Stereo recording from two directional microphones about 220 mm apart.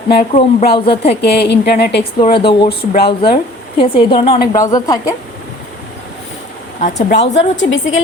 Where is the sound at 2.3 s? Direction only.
25° left (ahead or behind).